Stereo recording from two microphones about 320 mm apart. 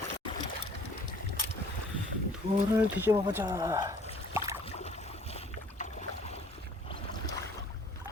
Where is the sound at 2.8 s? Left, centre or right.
Centre.